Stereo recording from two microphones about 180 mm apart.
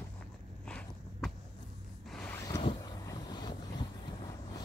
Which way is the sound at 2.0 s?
5° left (ahead or behind).